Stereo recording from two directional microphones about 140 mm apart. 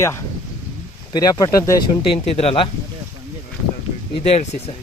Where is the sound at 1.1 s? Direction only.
30° left (ahead or behind).